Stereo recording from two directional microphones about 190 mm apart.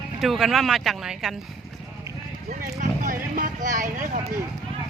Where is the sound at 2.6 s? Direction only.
45° right (ahead or behind).